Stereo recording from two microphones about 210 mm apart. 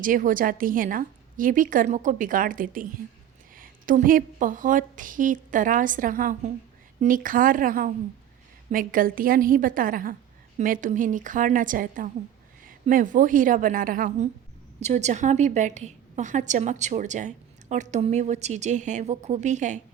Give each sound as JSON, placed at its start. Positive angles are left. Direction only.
{"t": 0.0, "sound": "a woman's voice", "side_deg": -40}